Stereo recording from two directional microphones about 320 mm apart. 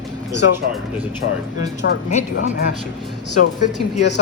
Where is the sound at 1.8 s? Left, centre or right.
Left.